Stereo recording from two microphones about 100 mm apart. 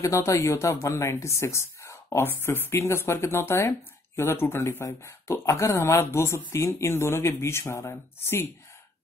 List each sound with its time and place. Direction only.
0.0 s speech: 30° left (ahead or behind)